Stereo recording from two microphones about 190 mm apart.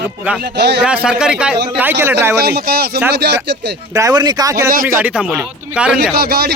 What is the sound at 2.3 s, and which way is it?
Speech, 55° right (ahead or behind).